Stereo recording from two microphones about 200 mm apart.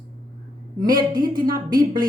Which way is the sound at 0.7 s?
20° right (ahead or behind).